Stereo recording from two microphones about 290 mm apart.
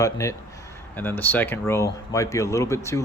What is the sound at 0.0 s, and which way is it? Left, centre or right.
Speech, centre.